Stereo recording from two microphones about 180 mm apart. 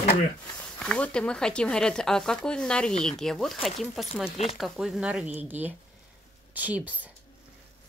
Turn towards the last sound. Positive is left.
turn(degrees=-10)  # may be behind; listen again after turning